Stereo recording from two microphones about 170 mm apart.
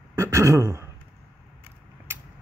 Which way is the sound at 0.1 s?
15° right (ahead or behind).